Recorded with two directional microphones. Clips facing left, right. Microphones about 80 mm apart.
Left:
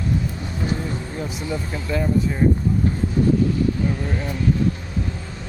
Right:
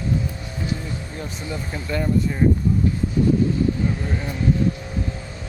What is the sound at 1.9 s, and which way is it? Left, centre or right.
Speech, centre.